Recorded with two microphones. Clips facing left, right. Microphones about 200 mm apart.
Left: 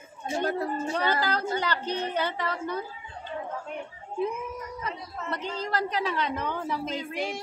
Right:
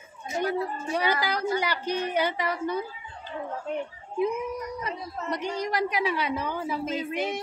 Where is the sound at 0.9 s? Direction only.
10° right (ahead or behind).